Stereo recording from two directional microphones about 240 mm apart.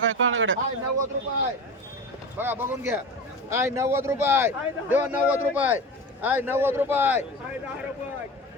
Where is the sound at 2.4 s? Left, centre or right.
Centre.